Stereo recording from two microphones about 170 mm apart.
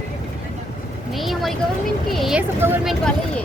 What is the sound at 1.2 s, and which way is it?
Speech, centre (ahead or behind).